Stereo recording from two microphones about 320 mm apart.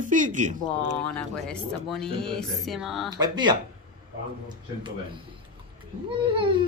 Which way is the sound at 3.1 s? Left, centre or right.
Centre.